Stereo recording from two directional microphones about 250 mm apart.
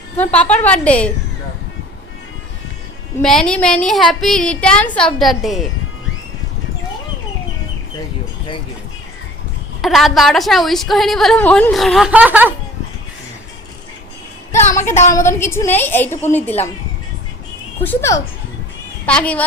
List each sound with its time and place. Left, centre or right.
0.2 s a woman's voice: centre
3.2 s a woman's voice: centre
9.8 s a woman's voice: centre
14.5 s speech: centre
14.8 s speech: left
15.1 s a woman's voice: centre
17.8 s a woman's voice: centre